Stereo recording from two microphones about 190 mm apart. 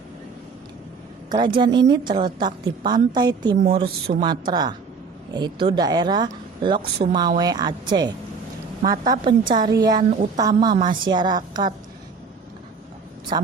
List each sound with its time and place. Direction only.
1.3 s speech: 25° right (ahead or behind)
13.3 s speech: 25° right (ahead or behind)